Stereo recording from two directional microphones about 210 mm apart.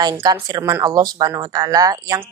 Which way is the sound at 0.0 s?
15° right (ahead or behind).